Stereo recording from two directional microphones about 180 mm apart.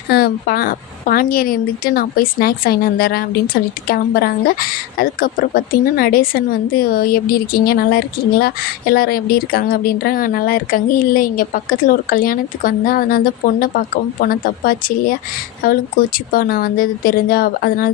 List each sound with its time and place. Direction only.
0.1 s a woman's voice: 55° left (ahead or behind)